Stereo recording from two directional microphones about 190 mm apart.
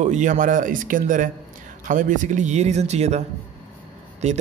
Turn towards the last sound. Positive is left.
turn(degrees=-35)  # may be behind; listen again after turning